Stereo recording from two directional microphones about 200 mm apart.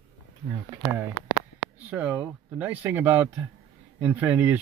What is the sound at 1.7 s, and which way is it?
Speech, 10° right (ahead or behind).